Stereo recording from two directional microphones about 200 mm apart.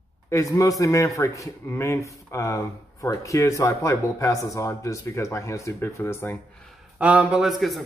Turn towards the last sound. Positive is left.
turn(degrees=0)  # may be behind; listen again after turning